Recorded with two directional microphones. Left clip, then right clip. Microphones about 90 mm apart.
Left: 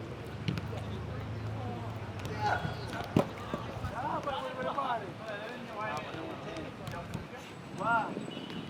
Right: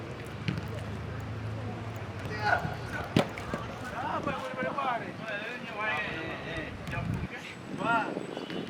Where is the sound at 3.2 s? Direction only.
25° right (ahead or behind).